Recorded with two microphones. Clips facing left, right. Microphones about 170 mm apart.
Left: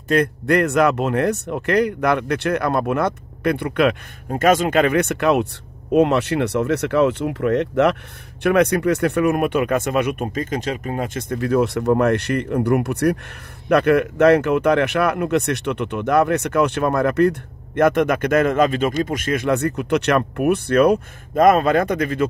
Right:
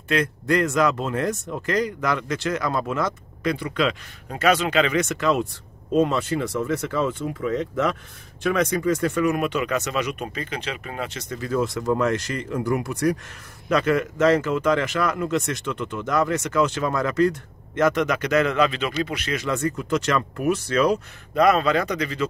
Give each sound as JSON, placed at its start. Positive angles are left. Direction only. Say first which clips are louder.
{"t": 0.1, "sound": "speech", "louder": "left 5 dB", "side_deg": 60}
{"t": 11.1, "sound": "speech", "louder": "left 6 dB", "side_deg": 55}